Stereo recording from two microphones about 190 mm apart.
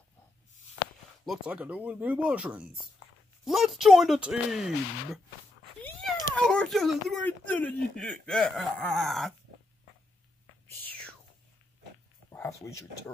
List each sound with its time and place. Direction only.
1.2 s speech: 5° right (ahead or behind)
5.8 s speech: 10° left (ahead or behind)
12.3 s speech: 15° left (ahead or behind)